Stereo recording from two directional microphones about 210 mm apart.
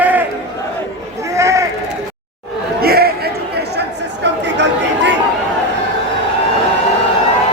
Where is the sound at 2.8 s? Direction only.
45° right (ahead or behind).